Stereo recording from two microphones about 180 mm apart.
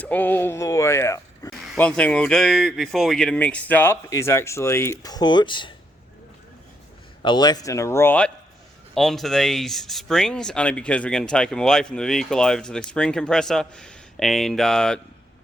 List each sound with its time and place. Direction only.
0.0 s speech: 10° left (ahead or behind)
1.5 s speech: centre (ahead or behind); by 5.7 s 25° left (ahead or behind)
7.2 s speech: 25° left (ahead or behind); by 15.0 s 5° left (ahead or behind)